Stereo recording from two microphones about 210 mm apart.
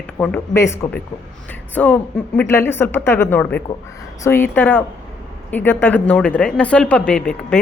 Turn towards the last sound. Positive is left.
turn(degrees=5)  # may be behind; listen again after turning